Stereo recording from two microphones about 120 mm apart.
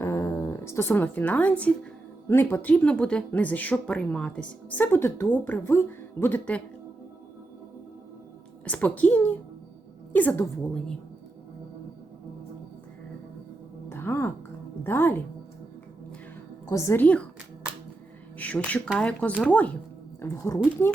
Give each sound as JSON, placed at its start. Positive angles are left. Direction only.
{"t": 0.0, "sound": "speech", "side_deg": 25}
{"t": 8.6, "sound": "speech", "side_deg": 10}
{"t": 13.9, "sound": "music", "side_deg": 20}
{"t": 14.8, "sound": "speech", "side_deg": 20}
{"t": 16.6, "sound": "a woman's voice", "side_deg": 25}
{"t": 17.0, "sound": "speech", "side_deg": 10}
{"t": 18.3, "sound": "speech", "side_deg": 10}
{"t": 20.2, "sound": "a woman's voice", "side_deg": 20}